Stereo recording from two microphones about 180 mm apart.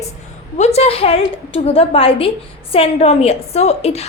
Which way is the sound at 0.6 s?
35° left (ahead or behind).